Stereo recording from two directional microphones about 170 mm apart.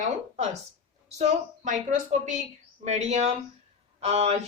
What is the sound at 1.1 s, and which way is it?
A woman's voice, 40° right (ahead or behind).